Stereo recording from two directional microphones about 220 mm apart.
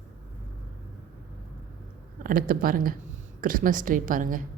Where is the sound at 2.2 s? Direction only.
40° right (ahead or behind).